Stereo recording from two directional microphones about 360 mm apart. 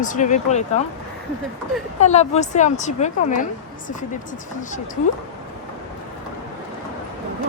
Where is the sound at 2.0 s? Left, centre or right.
Centre.